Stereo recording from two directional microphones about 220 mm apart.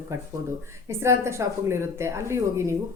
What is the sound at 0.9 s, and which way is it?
A woman's voice, 10° right (ahead or behind).